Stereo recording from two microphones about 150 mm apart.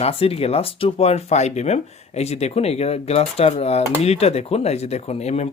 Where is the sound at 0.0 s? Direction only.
40° left (ahead or behind).